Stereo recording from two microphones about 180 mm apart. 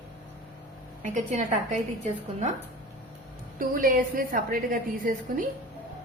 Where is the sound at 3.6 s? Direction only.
50° right (ahead or behind).